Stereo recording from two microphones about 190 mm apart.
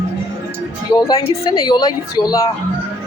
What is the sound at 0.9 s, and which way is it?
Speech, 20° left (ahead or behind).